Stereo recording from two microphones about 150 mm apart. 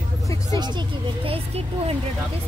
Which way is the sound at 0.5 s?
30° right (ahead or behind).